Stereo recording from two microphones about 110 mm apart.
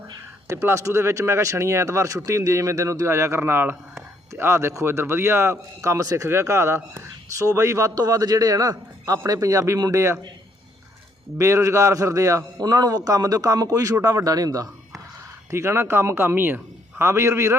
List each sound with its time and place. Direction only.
0.4 s a man's voice: 25° right (ahead or behind)
11.3 s a man's voice: 25° right (ahead or behind)